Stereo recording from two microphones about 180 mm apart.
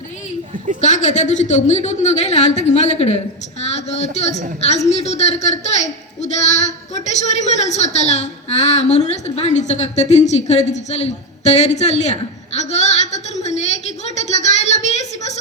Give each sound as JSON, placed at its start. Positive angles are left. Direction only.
{"t": 0.8, "sound": "a woman's voice", "side_deg": 40}